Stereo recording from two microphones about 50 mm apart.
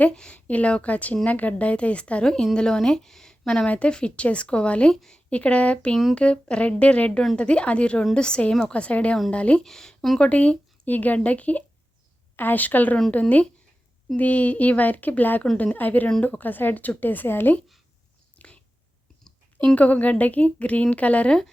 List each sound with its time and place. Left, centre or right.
0.1 s a woman's voice: centre
2.2 s a woman's voice: centre
4.9 s speech: centre
5.3 s a woman's voice: left
9.6 s speech: centre
10.2 s a woman's voice: left
18.3 s whispering: left
19.6 s a woman's voice: left
21.2 s speech: centre